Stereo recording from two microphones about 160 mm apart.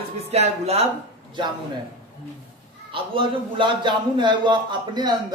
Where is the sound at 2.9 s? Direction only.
30° right (ahead or behind).